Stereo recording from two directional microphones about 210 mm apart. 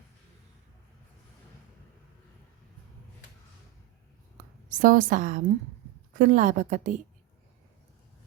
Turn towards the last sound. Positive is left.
turn(degrees=-35)  # may be behind; listen again after turning